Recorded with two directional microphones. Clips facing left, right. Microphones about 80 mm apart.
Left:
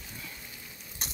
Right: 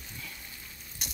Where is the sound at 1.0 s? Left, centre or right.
Left.